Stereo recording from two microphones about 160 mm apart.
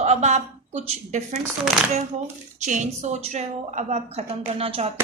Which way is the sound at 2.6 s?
50° right (ahead or behind).